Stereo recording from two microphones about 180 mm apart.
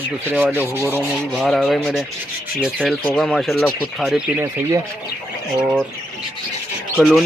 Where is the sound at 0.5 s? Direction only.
10° right (ahead or behind).